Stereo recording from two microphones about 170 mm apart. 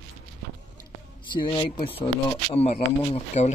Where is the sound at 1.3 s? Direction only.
30° left (ahead or behind).